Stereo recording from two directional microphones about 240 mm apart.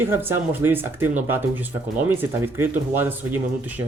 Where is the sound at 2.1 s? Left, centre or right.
Centre.